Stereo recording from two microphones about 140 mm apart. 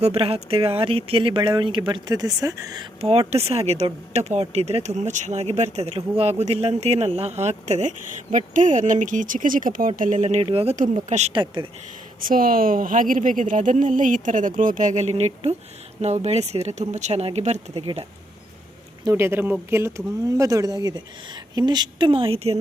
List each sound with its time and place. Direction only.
0.0 s speech: 45° right (ahead or behind); by 2.8 s 25° right (ahead or behind)
3.0 s speech: 45° right (ahead or behind)
12.3 s speech: 90° right; by 17.8 s 50° right (ahead or behind)
19.0 s speech: 15° right (ahead or behind); by 22.5 s 40° right (ahead or behind)